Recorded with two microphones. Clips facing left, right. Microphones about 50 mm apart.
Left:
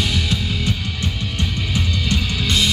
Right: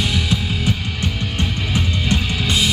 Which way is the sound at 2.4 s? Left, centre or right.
Centre.